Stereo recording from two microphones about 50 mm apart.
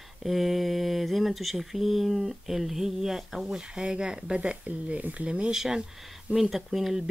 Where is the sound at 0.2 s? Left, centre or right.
Centre; by 5.3 s right.